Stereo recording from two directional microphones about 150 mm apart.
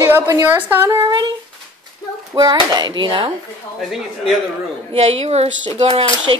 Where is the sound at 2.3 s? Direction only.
25° right (ahead or behind).